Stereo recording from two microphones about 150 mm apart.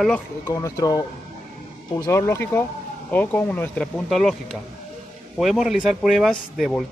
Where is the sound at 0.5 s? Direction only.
25° left (ahead or behind).